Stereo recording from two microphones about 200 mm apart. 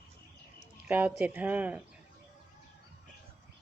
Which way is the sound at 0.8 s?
5° right (ahead or behind).